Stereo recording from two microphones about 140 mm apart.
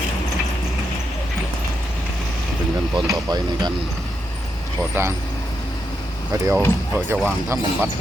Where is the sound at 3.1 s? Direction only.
30° right (ahead or behind).